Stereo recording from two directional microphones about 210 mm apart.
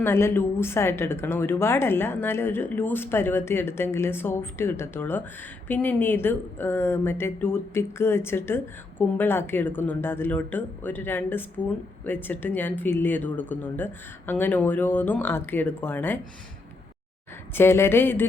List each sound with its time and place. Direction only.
0.0 s speech: 10° left (ahead or behind)
17.5 s speech: 10° left (ahead or behind)